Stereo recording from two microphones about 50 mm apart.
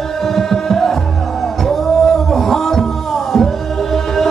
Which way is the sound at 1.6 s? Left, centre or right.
Centre.